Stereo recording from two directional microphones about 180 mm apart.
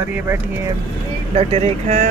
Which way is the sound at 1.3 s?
35° right (ahead or behind).